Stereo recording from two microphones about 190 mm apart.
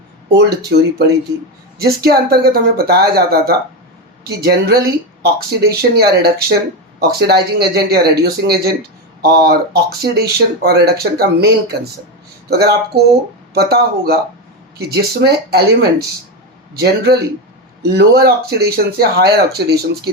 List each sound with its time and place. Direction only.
0.3 s speech: 60° right (ahead or behind)